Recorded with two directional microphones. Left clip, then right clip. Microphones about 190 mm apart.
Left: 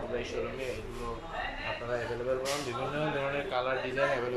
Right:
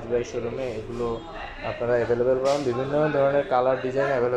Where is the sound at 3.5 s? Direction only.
35° right (ahead or behind).